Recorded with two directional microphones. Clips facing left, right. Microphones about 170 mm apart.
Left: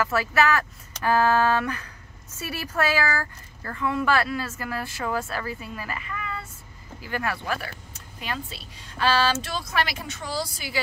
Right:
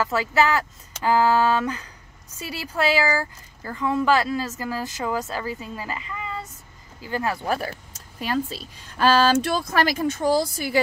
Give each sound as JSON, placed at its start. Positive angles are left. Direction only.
{"t": 0.0, "sound": "speech", "side_deg": -20}
{"t": 1.6, "sound": "speech", "side_deg": -20}
{"t": 7.4, "sound": "speech", "side_deg": -35}